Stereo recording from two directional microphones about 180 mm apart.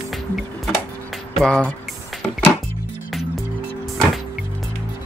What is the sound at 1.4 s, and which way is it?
Speech, 5° left (ahead or behind).